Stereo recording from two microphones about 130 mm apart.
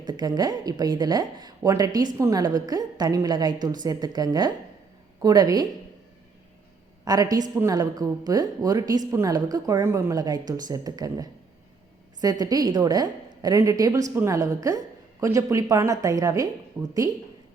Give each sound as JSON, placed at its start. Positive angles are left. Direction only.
{"t": 0.0, "sound": "a woman's voice", "side_deg": -35}
{"t": 7.0, "sound": "a woman's voice", "side_deg": -30}
{"t": 9.0, "sound": "a woman's voice", "side_deg": -20}